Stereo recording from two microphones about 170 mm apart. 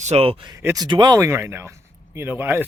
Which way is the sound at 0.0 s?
40° right (ahead or behind).